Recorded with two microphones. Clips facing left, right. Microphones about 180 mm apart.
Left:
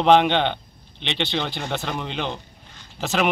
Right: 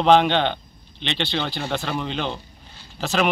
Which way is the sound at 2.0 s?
15° left (ahead or behind).